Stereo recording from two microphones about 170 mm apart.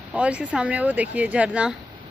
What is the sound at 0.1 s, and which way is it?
Speech, 5° right (ahead or behind).